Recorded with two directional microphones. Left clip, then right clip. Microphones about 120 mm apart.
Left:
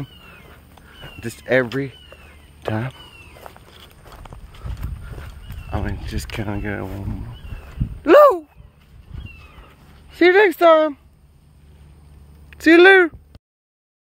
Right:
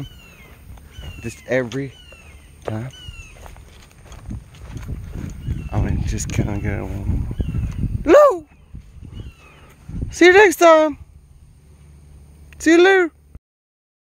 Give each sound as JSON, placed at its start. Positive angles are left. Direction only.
{"t": 1.2, "sound": "speech", "side_deg": 5}
{"t": 2.6, "sound": "speech", "side_deg": 25}
{"t": 3.3, "sound": "walk", "side_deg": 30}
{"t": 5.7, "sound": "speech", "side_deg": -10}
{"t": 8.0, "sound": "speech", "side_deg": -10}
{"t": 10.1, "sound": "speech", "side_deg": -25}
{"t": 12.4, "sound": "speech", "side_deg": 0}